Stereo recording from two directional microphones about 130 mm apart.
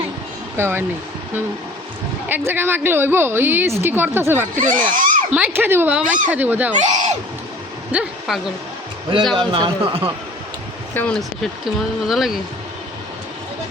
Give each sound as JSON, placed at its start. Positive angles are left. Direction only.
{"t": 0.5, "sound": "speech", "side_deg": -20}
{"t": 2.3, "sound": "a woman's voice", "side_deg": -15}
{"t": 4.5, "sound": "speech", "side_deg": -90}
{"t": 5.3, "sound": "a woman's voice", "side_deg": -15}
{"t": 6.7, "sound": "speech", "side_deg": -70}
{"t": 7.9, "sound": "a woman's voice", "side_deg": -10}
{"t": 9.5, "sound": "speech", "side_deg": -40}
{"t": 10.9, "sound": "speech", "side_deg": 10}
{"t": 11.2, "sound": "speech", "side_deg": 0}